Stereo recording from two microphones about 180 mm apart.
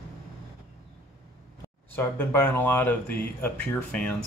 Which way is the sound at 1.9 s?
10° left (ahead or behind).